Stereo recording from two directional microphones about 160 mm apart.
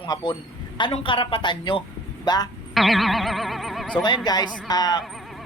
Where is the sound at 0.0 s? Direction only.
30° left (ahead or behind).